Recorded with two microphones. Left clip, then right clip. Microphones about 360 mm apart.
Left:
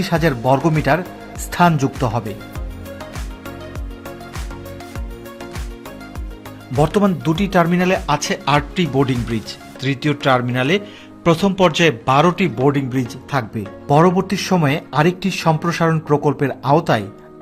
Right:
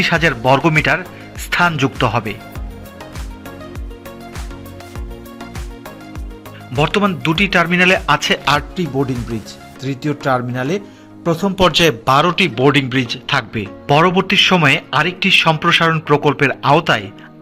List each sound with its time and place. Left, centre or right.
0.0 s speech: centre
6.8 s speech: centre